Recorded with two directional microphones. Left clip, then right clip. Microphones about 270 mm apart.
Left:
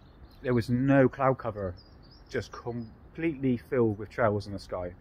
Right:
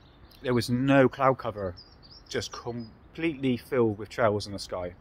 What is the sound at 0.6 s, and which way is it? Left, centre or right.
Speech, centre.